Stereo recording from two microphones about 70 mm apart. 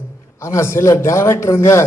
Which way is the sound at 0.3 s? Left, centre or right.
Left.